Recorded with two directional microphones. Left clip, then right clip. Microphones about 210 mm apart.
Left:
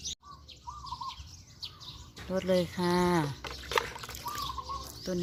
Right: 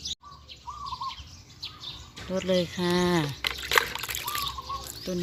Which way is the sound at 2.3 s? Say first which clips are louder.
Right 2 dB; 5° right (ahead or behind).